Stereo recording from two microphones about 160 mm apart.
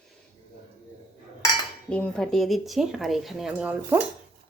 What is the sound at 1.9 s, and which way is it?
Speech, 5° left (ahead or behind).